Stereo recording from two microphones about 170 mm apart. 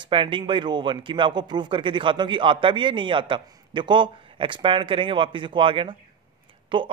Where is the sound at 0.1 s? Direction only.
30° right (ahead or behind).